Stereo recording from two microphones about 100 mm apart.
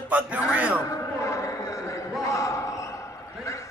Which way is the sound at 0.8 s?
30° left (ahead or behind).